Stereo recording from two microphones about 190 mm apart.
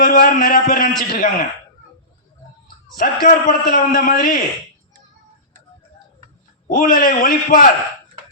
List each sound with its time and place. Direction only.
0.0 s a man's voice: 50° left (ahead or behind)
2.9 s a man's voice: 45° left (ahead or behind)
6.7 s a man's voice: 50° left (ahead or behind)